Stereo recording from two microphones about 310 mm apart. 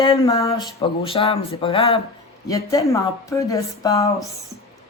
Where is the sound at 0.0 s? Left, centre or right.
Centre.